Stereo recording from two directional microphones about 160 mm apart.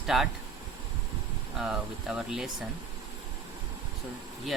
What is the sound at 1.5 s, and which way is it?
Speech, 5° right (ahead or behind).